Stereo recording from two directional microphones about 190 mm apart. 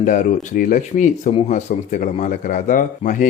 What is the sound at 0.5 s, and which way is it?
A man's voice, 45° left (ahead or behind).